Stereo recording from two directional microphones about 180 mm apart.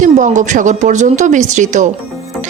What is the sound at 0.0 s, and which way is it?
Speech, 45° right (ahead or behind).